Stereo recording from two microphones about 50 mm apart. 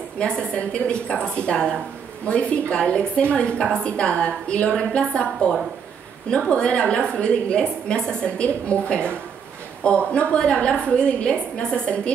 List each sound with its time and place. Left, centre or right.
0.2 s a woman's voice: left
6.5 s a woman's voice: left